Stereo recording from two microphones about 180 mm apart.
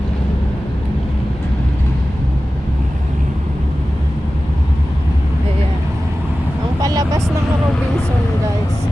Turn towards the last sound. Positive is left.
turn(degrees=-20)  # may be behind; listen again after turning